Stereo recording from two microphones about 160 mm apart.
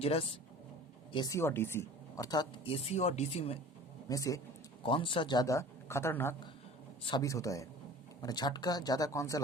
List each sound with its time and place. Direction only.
0.0 s speech: 35° left (ahead or behind)
1.4 s speech: 15° left (ahead or behind); by 3.6 s 40° left (ahead or behind)
4.1 s speech: 20° left (ahead or behind)
4.8 s speech: 30° left (ahead or behind)